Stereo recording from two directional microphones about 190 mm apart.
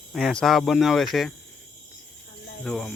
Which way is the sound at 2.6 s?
5° left (ahead or behind).